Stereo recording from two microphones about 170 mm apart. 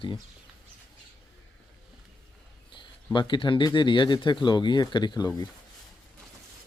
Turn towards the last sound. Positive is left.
turn(degrees=25)  # may be behind; listen again after turning